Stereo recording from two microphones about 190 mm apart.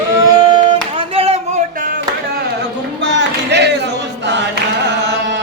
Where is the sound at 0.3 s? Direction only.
25° right (ahead or behind).